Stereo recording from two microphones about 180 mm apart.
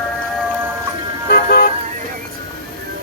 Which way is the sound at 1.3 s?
55° left (ahead or behind).